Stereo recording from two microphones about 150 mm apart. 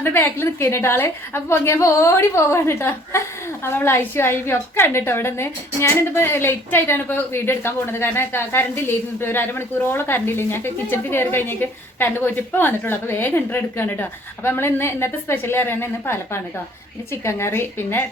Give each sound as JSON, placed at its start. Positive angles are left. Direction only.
{"t": 0.0, "sound": "a woman's voice", "side_deg": 15}